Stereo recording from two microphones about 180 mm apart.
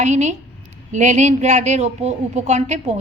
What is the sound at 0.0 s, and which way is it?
A woman's voice, 40° right (ahead or behind).